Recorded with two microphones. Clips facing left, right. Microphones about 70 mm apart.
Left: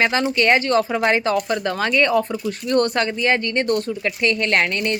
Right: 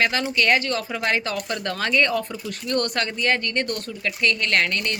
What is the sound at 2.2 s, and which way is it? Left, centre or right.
A woman's voice, left.